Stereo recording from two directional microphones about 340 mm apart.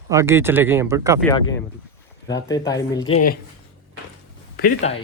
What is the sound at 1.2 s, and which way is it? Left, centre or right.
Speech, centre.